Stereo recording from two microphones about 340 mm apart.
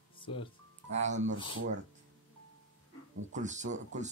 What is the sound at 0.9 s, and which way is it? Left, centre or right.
Speech, right.